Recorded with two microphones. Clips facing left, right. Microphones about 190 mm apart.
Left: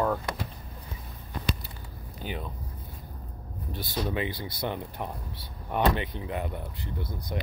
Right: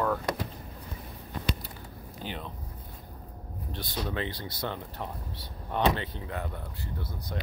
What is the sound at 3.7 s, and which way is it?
Speech, 10° left (ahead or behind).